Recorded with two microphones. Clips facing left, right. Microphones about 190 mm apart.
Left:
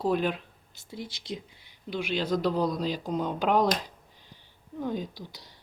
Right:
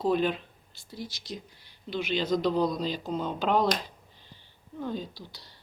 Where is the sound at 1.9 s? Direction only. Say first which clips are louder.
Right 1 dB; 10° left (ahead or behind).